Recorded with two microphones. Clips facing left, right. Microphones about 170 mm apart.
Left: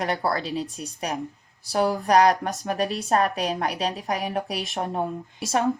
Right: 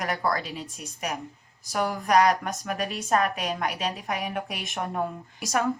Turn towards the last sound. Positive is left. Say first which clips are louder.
# left 3 dB
turn(degrees=25)  # may be behind; listen again after turning